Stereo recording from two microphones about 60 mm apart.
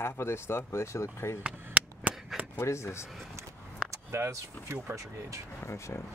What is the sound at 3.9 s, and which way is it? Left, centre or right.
Speech, right.